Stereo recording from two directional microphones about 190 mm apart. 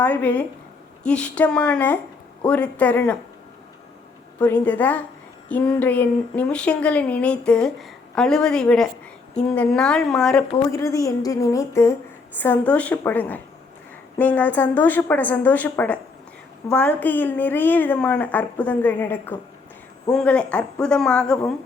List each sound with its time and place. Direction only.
0.0 s speech: 10° left (ahead or behind)
4.4 s a woman's voice: 10° left (ahead or behind)
10.7 s a woman's voice: 15° left (ahead or behind)